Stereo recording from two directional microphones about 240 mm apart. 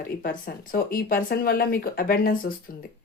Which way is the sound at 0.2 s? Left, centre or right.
Left.